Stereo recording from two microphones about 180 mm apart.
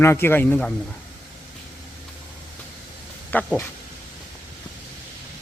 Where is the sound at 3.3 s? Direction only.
10° left (ahead or behind).